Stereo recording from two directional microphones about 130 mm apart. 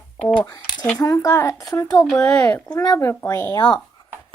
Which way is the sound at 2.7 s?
30° left (ahead or behind).